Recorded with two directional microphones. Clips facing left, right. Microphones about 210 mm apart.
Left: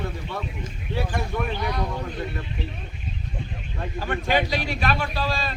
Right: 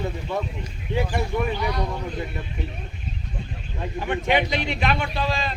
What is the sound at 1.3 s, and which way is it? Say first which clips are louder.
Speech: right 4 dB; 15° right (ahead or behind).